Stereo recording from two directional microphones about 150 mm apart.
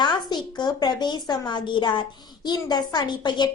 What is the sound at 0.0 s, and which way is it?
A woman's voice, 30° left (ahead or behind).